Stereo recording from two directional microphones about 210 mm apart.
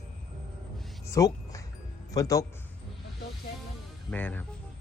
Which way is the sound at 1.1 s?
15° left (ahead or behind).